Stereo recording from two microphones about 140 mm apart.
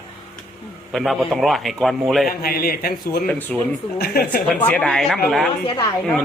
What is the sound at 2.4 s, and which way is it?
Speech, 90° left.